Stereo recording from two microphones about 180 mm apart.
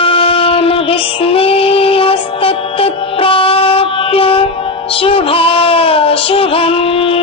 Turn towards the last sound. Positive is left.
turn(degrees=30)  # may be behind; listen again after turning